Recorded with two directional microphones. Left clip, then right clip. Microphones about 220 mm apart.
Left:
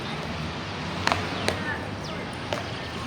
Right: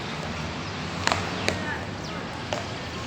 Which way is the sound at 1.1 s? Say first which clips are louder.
Even; 5° right (ahead or behind).